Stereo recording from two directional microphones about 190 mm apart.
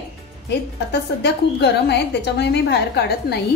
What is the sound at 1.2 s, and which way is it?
A woman's voice, 60° left (ahead or behind).